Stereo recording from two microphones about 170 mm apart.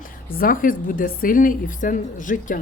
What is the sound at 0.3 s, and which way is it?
A woman's voice, 55° left (ahead or behind).